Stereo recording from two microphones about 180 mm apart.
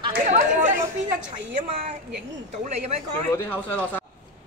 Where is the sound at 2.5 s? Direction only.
40° right (ahead or behind).